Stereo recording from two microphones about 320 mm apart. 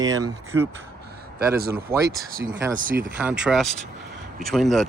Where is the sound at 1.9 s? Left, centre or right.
Centre.